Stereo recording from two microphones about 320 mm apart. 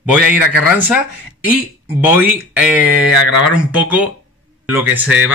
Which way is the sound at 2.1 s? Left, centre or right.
Centre.